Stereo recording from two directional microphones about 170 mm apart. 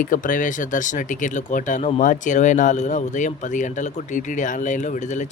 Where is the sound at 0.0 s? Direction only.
50° left (ahead or behind).